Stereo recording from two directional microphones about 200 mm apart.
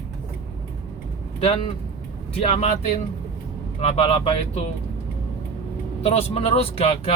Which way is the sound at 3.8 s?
30° left (ahead or behind).